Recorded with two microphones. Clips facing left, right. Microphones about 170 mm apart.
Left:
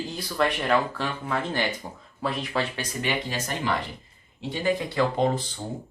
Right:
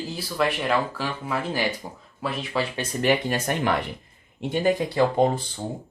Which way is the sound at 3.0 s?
55° right (ahead or behind).